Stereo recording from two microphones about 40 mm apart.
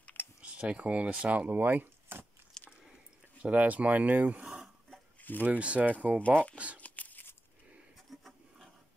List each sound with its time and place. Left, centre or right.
0.4 s speech: right
1.5 s speech: right
2.6 s biting: centre
3.4 s speech: right
5.2 s a sound: left
5.6 s speech: right
5.9 s speech: right
6.3 s speech: left
6.8 s a sound: left
8.1 s wood: centre